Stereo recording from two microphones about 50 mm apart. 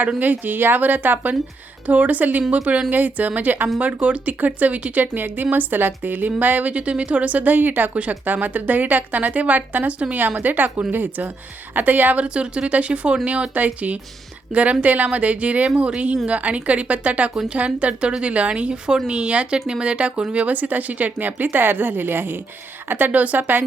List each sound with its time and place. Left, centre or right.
0.2 s speech: right
12.2 s speech: right